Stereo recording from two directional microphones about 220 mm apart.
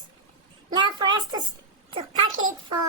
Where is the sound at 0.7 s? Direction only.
20° right (ahead or behind).